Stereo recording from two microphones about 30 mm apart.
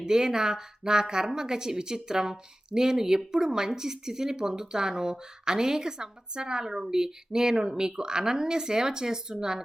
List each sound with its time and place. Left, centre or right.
0.0 s speech: right